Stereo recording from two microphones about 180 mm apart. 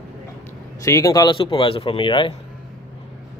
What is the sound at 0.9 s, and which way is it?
Speech, 15° left (ahead or behind).